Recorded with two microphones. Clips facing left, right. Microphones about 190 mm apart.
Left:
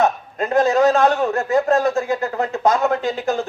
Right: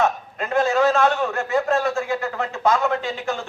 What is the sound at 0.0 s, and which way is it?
A man's voice, 40° left (ahead or behind).